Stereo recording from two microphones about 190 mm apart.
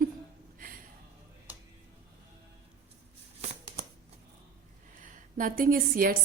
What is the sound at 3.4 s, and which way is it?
Shuffling cards, 30° right (ahead or behind).